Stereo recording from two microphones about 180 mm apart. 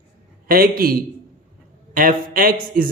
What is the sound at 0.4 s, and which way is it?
A man's voice, 55° right (ahead or behind).